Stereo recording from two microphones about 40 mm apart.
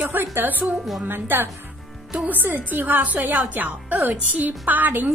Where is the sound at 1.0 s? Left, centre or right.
Right.